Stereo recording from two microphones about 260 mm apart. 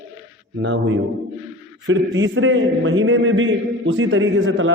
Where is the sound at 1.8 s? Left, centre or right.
Right.